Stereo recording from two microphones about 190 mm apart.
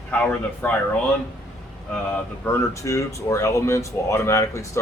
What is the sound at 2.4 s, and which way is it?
Speech, 15° left (ahead or behind).